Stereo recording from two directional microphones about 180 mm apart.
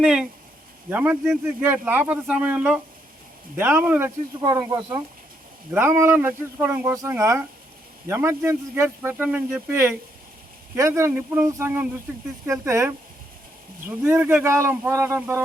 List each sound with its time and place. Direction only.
0.0 s a man's voice: 5° right (ahead or behind)